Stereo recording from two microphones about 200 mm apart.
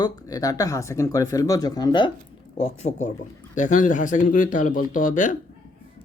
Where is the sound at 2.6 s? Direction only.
35° left (ahead or behind).